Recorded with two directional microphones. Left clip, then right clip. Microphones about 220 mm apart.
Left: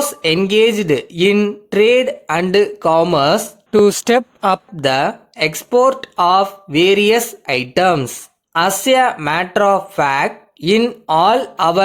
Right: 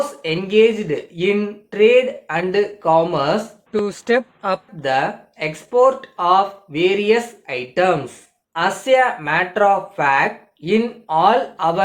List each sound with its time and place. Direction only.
0.2 s speech: 50° left (ahead or behind)